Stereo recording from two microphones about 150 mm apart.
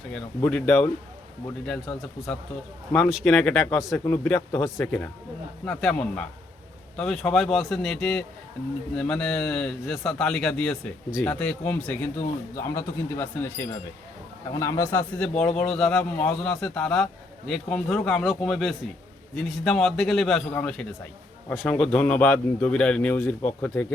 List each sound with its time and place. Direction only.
0.1 s a man's voice: 5° left (ahead or behind)
3.9 s speech: 10° left (ahead or behind)
5.6 s a man's voice: 5° left (ahead or behind)
14.5 s a man's voice: 20° left (ahead or behind)